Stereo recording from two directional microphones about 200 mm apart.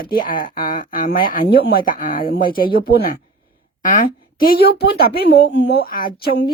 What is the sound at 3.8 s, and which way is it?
Speech, 40° left (ahead or behind).